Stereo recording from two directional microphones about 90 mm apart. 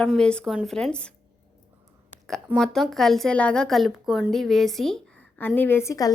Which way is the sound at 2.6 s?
5° left (ahead or behind).